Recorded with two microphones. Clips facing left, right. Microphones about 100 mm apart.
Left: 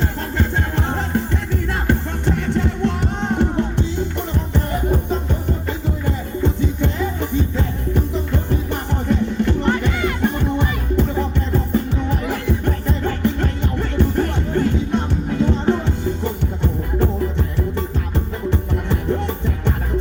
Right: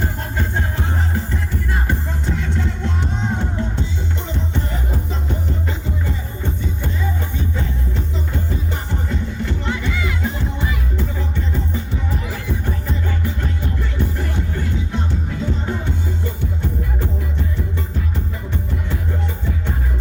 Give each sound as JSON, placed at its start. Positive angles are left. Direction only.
{"t": 0.8, "sound": "music", "side_deg": 75}
{"t": 8.1, "sound": "music", "side_deg": 65}